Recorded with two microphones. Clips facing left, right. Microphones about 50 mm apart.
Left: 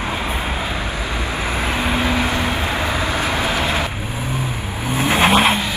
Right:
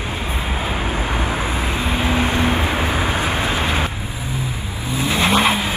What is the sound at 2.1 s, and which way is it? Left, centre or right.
Vehicle, right.